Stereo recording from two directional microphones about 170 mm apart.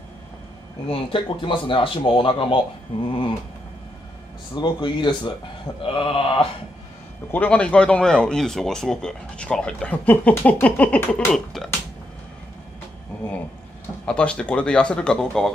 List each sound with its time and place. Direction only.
0.8 s speech: 30° left (ahead or behind)
4.6 s speech: 25° left (ahead or behind)
7.2 s speech: 10° left (ahead or behind)
14.0 s speech: 5° left (ahead or behind)